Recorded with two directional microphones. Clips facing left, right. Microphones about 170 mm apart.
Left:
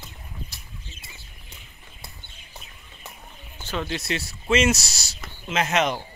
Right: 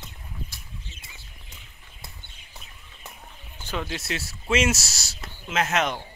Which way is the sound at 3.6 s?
10° right (ahead or behind).